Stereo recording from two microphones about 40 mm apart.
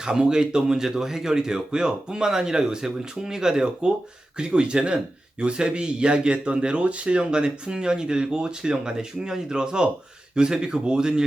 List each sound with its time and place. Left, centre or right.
0.0 s speech: centre